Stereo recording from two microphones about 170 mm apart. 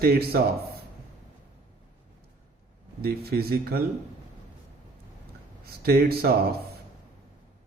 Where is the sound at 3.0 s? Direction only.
65° right (ahead or behind).